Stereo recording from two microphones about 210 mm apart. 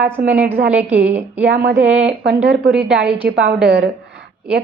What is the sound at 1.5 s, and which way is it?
Speech, 60° right (ahead or behind).